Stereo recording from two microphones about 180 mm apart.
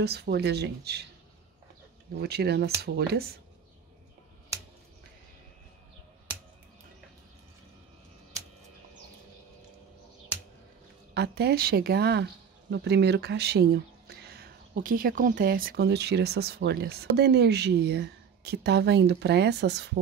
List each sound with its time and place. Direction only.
0.0 s speech: 65° right (ahead or behind)
2.1 s speech: 65° right (ahead or behind)
11.1 s speech: 65° right (ahead or behind)